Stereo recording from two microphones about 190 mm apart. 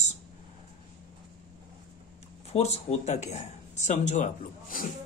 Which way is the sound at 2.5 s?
35° left (ahead or behind).